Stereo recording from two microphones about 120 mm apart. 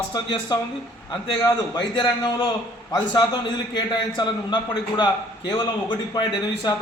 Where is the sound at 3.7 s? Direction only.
40° left (ahead or behind).